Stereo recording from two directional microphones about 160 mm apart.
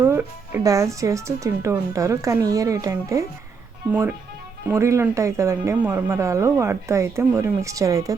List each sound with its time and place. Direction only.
0.0 s speech: 15° right (ahead or behind)
4.7 s speech: 15° right (ahead or behind)